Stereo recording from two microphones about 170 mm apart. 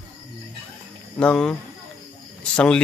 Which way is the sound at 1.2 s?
5° left (ahead or behind).